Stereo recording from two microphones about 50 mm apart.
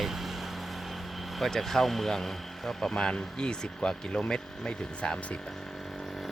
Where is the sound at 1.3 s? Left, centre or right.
Centre.